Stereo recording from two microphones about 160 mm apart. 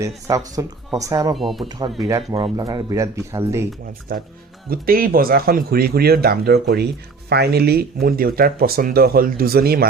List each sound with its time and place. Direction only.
0.3 s speech: 20° right (ahead or behind)
1.4 s speech: centre (ahead or behind)
2.0 s speech: 20° right (ahead or behind)
4.1 s speech: 65° right (ahead or behind)